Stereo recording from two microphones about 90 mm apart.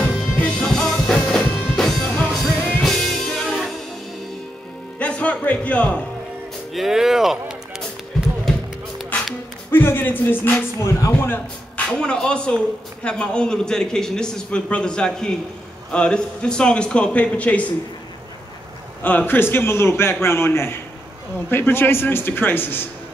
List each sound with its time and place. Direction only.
0.4 s music: 10° left (ahead or behind)
2.5 s music: 20° left (ahead or behind)
2.8 s music: centre (ahead or behind)
4.9 s music: 15° left (ahead or behind)
6.7 s speech: 5° right (ahead or behind)
9.7 s speech: 25° left (ahead or behind)
11.9 s a man's voice: 10° left (ahead or behind)
19.0 s speech: 20° left (ahead or behind)